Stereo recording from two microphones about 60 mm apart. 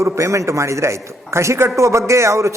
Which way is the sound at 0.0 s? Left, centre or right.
Right.